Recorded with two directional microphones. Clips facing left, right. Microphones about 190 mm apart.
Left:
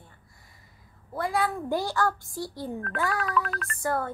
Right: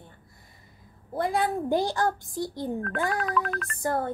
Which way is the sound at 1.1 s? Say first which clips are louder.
Right 2 dB; 20° right (ahead or behind).